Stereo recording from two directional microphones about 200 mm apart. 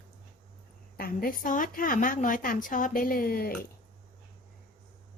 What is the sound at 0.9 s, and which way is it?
A woman's voice, 45° left (ahead or behind).